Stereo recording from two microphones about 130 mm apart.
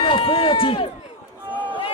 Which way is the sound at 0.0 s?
40° left (ahead or behind).